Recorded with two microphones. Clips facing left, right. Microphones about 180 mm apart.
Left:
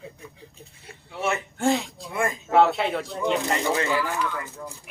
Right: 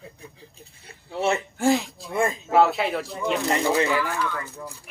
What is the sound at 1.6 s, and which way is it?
A man's voice, centre (ahead or behind).